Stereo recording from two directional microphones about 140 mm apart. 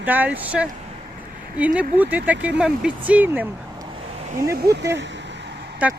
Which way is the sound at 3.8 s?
35° right (ahead or behind).